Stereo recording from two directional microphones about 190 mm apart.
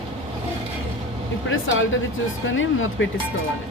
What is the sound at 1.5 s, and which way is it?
Speech, 90° left.